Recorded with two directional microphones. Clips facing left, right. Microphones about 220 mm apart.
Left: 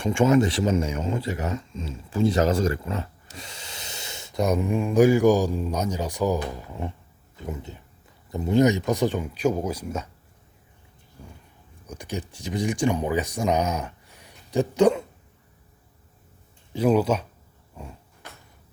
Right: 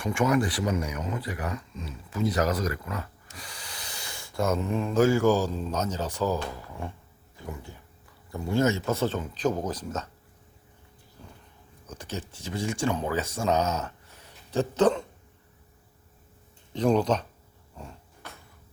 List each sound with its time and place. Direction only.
0.0 s speech: 25° left (ahead or behind); by 10.1 s 10° left (ahead or behind)
11.9 s speech: 15° left (ahead or behind)
16.7 s speech: 5° left (ahead or behind)
17.7 s a sound: 10° left (ahead or behind)